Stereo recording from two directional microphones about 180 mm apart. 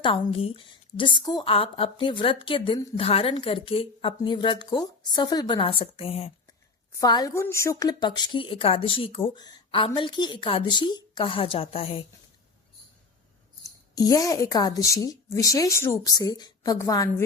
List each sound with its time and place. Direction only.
0.0 s a woman's voice: 30° left (ahead or behind)
7.0 s a woman's voice: 20° left (ahead or behind)
13.9 s a woman's voice: 20° left (ahead or behind)